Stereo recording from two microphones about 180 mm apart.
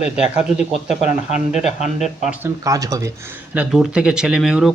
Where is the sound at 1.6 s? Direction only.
40° left (ahead or behind).